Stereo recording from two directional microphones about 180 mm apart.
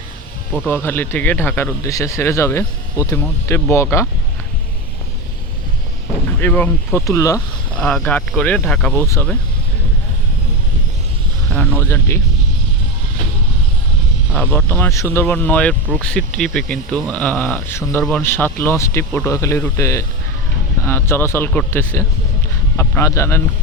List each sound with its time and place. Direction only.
0.7 s speech: 10° left (ahead or behind)
6.4 s speech: 10° left (ahead or behind)
7.8 s speech: 5° left (ahead or behind)
11.5 s speech: 10° left (ahead or behind)
14.3 s speech: 10° left (ahead or behind)